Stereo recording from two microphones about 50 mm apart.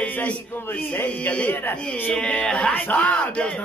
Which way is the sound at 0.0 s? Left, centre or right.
Left.